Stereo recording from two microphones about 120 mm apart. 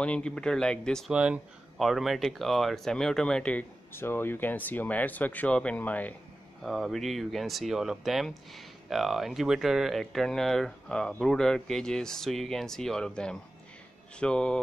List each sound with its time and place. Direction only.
0.0 s speech: 10° left (ahead or behind)
1.1 s speech: 10° right (ahead or behind); by 6.1 s 15° left (ahead or behind)
6.6 s speech: centre (ahead or behind)